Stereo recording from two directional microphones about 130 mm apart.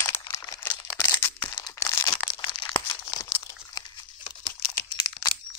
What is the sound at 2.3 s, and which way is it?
Tearing, 35° left (ahead or behind).